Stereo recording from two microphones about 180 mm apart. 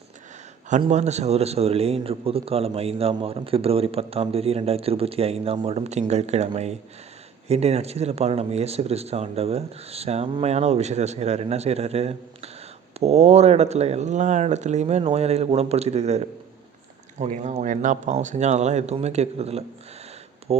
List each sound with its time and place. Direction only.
0.7 s a man's voice: 40° right (ahead or behind)